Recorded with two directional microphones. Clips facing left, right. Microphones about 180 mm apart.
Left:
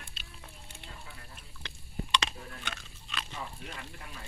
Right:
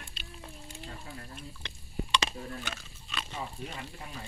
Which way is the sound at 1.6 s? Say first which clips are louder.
Right 1 dB; centre (ahead or behind).